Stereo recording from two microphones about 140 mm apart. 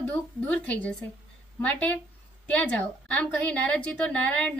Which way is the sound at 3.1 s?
10° left (ahead or behind).